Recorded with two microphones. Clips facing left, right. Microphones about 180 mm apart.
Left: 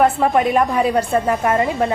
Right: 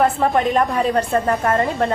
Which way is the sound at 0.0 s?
10° left (ahead or behind).